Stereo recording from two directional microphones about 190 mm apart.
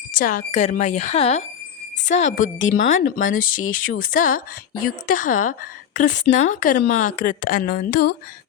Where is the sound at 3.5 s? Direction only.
90° left.